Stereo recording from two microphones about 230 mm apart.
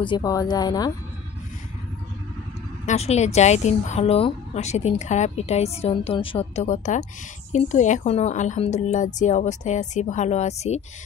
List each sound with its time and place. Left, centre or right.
0.0 s a woman's voice: centre
2.9 s a woman's voice: left